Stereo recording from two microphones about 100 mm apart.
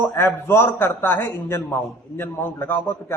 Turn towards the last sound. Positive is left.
turn(degrees=20)  # may be behind; listen again after turning